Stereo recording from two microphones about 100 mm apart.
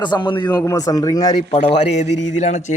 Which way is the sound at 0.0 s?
50° left (ahead or behind).